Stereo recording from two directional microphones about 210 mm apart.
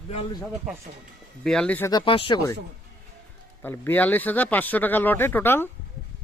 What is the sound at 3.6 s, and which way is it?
Speech, 10° left (ahead or behind).